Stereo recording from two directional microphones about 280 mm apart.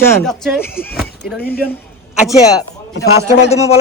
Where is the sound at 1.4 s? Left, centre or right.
Left.